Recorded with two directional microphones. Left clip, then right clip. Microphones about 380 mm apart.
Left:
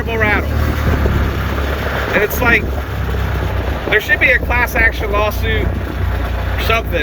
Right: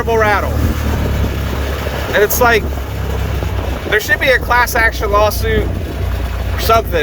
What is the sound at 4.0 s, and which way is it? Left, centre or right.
Speech, centre.